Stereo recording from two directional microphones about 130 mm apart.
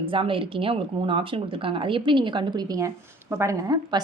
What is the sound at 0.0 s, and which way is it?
A woman's voice, 40° right (ahead or behind).